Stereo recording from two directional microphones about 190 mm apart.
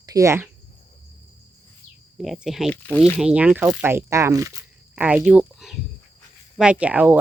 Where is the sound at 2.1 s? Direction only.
Centre (ahead or behind).